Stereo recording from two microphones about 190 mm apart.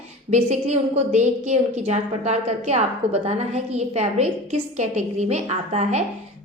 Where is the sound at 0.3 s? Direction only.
35° right (ahead or behind).